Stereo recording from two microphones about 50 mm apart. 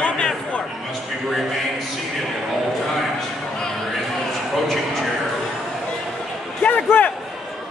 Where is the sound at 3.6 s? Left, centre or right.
Centre.